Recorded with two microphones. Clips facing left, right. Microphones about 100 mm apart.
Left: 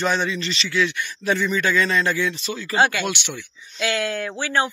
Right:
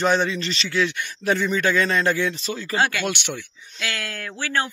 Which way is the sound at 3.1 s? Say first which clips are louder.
Right 1 dB; 45° right (ahead or behind).